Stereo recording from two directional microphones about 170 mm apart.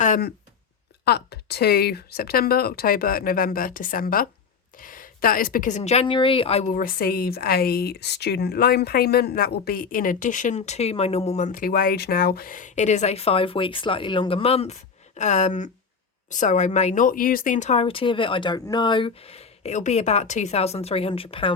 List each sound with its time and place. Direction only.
0.0 s a sound: 50° left (ahead or behind)
1.0 s speech: 70° left (ahead or behind); by 6.7 s 40° left (ahead or behind)
6.7 s speech: 55° left (ahead or behind); by 21.5 s 35° left (ahead or behind)